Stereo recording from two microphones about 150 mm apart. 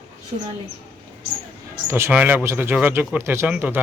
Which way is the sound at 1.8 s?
15° right (ahead or behind).